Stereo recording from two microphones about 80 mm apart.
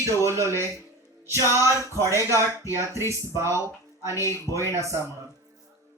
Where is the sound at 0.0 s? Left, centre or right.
Right.